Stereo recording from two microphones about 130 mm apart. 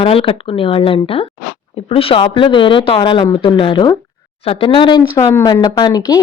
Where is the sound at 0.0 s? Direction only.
45° left (ahead or behind).